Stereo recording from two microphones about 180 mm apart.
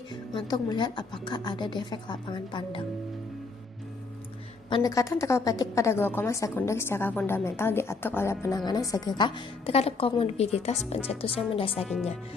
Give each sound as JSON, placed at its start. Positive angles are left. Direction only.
{"t": 0.1, "sound": "speech", "side_deg": 25}
{"t": 4.7, "sound": "a woman's voice", "side_deg": 20}